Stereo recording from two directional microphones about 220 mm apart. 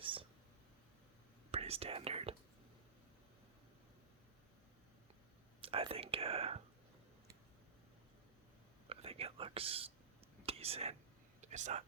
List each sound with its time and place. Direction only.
0.0 s a sound: 25° right (ahead or behind)
1.5 s speech: 25° right (ahead or behind)
5.6 s whispering: 25° right (ahead or behind)
8.9 s whispering: 25° right (ahead or behind)